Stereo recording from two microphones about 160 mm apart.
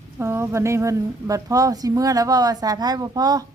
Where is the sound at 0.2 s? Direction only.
15° right (ahead or behind).